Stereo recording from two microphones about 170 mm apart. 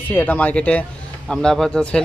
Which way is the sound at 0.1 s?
10° left (ahead or behind).